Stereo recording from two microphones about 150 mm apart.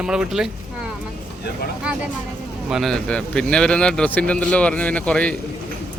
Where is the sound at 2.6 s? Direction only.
Centre (ahead or behind).